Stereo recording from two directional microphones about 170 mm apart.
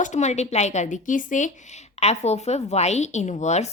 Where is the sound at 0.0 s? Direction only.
45° left (ahead or behind).